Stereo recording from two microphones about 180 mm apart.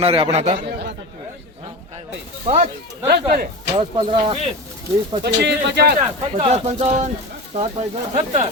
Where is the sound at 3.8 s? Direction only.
30° right (ahead or behind).